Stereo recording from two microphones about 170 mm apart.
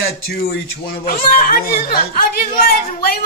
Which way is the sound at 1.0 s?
60° left (ahead or behind).